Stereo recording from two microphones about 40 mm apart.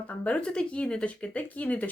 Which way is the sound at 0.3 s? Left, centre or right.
Left.